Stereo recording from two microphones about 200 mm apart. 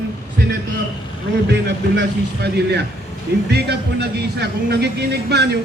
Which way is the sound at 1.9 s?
55° right (ahead or behind).